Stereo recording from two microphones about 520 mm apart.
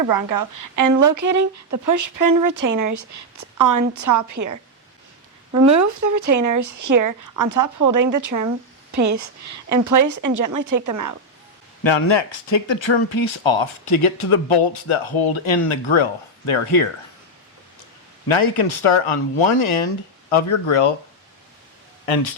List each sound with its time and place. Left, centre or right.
0.1 s a woman's voice: right
11.8 s speech: left
18.3 s speech: left